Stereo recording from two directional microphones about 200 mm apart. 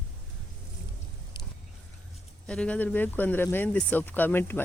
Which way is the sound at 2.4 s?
5° left (ahead or behind).